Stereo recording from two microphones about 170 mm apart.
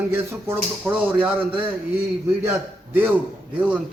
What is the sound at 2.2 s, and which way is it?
A man's voice, 15° right (ahead or behind).